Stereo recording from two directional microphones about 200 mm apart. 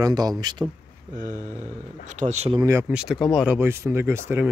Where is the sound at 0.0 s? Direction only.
20° right (ahead or behind).